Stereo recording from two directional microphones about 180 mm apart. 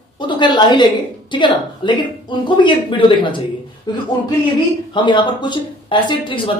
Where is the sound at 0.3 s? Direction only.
25° left (ahead or behind).